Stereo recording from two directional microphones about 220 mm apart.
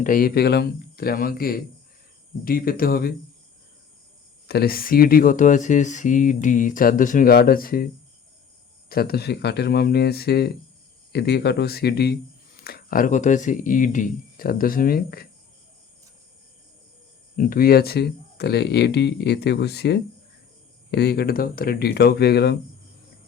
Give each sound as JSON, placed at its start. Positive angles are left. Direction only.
{"t": 0.0, "sound": "speech", "side_deg": 40}
{"t": 4.4, "sound": "speech", "side_deg": 45}
{"t": 8.9, "sound": "speech", "side_deg": 45}
{"t": 17.3, "sound": "speech", "side_deg": 40}